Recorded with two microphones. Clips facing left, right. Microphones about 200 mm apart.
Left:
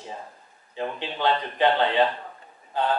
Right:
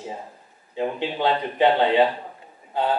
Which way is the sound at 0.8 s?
10° right (ahead or behind).